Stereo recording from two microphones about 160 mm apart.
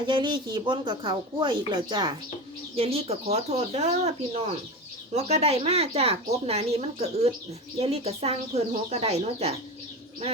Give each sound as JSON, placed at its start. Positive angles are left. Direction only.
{"t": 0.1, "sound": "a woman's voice", "side_deg": -30}